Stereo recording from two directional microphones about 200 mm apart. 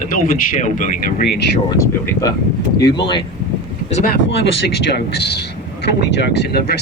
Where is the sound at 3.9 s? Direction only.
60° left (ahead or behind).